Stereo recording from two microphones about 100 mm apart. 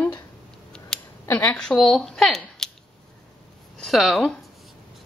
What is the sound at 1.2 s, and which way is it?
Speech, 25° left (ahead or behind).